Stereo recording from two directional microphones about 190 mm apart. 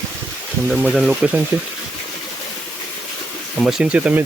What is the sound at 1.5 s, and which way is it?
Speech, 15° right (ahead or behind).